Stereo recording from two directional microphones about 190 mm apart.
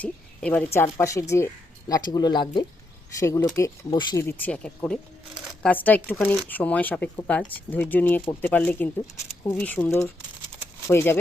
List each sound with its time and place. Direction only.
0.0 s speech: 5° left (ahead or behind)